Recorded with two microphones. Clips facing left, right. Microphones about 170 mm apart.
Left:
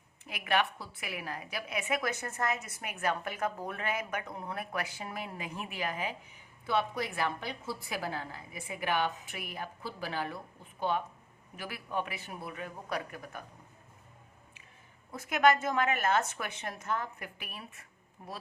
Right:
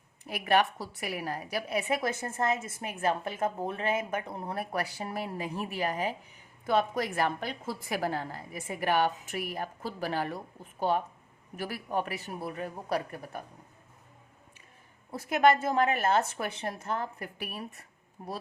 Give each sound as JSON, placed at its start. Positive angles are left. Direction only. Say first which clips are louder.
{"t": 0.3, "sound": "a woman's voice", "louder": "right 5 dB", "side_deg": -40}
{"t": 6.7, "sound": "a woman's voice", "louder": "right 4 dB", "side_deg": -45}
{"t": 15.1, "sound": "a woman's voice", "louder": "right 2 dB", "side_deg": -30}